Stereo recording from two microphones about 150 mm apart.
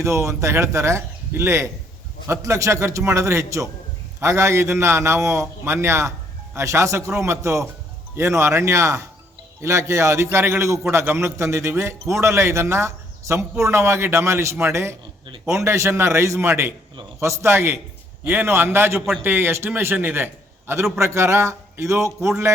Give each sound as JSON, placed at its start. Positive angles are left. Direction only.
{"t": 0.0, "sound": "a man's voice", "side_deg": -20}